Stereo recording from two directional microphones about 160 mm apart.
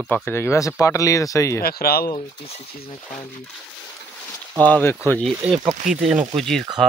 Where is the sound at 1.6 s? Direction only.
70° left (ahead or behind).